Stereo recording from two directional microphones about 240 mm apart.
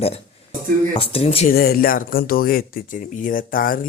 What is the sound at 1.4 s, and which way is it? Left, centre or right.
Speech, left.